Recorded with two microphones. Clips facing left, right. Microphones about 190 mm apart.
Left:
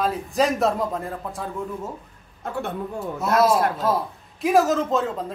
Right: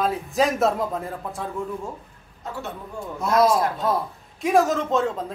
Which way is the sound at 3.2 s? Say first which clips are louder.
Even; centre (ahead or behind).